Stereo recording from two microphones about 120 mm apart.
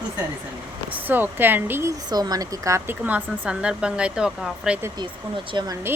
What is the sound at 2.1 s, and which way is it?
Speech, 35° right (ahead or behind).